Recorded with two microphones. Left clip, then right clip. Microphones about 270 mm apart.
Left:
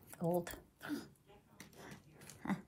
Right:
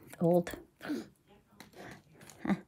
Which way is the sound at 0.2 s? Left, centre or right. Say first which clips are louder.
Right 9 dB; right.